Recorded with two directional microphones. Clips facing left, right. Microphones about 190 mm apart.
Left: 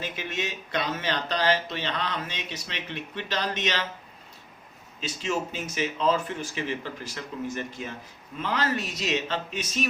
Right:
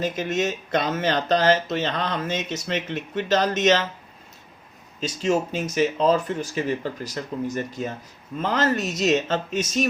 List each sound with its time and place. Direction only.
0.0 s speech: 45° right (ahead or behind)
4.9 s speech: 40° right (ahead or behind)